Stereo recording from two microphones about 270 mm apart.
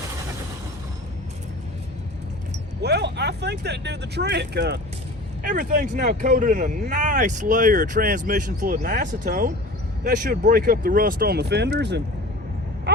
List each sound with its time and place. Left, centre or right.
2.8 s speech: right